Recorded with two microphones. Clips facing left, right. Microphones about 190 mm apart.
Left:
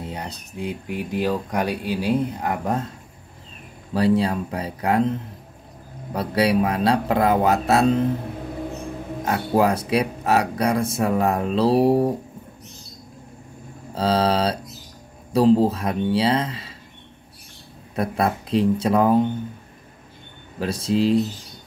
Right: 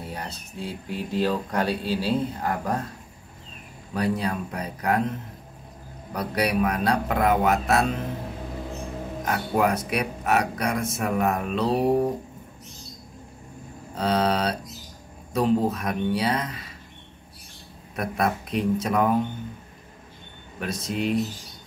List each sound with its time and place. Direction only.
0.0 s speech: 20° left (ahead or behind)
3.9 s a man's voice: 30° left (ahead or behind)
6.1 s a man's voice: 30° left (ahead or behind)
9.2 s speech: 30° left (ahead or behind)
13.9 s a man's voice: 30° left (ahead or behind)
17.9 s a man's voice: 30° left (ahead or behind)
20.5 s speech: 30° left (ahead or behind)